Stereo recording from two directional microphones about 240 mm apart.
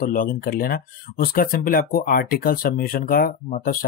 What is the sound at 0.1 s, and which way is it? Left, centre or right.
Speech, left.